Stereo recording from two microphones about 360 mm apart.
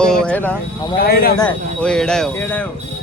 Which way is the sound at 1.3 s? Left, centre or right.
Centre.